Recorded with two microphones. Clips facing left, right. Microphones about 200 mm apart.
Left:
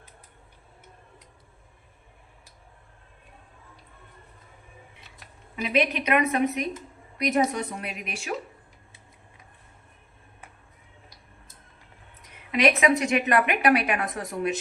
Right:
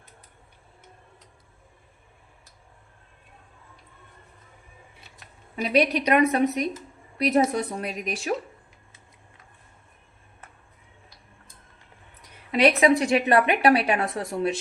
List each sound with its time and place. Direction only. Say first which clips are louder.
5.6 s a woman's voice: right 3 dB; 40° right (ahead or behind)
12.5 s a woman's voice: right 3 dB; 35° right (ahead or behind)